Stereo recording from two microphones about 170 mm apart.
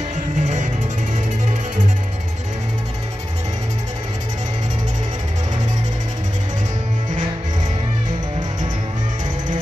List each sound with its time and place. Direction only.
0.4 s music: 45° right (ahead or behind)